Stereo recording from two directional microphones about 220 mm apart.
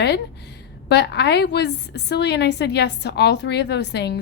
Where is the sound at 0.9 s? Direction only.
50° left (ahead or behind).